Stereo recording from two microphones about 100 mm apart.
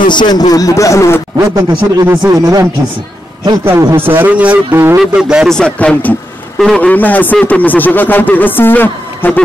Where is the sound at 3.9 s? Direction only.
20° right (ahead or behind).